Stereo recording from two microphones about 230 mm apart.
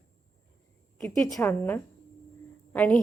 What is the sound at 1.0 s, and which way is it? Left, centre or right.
A woman's voice, centre.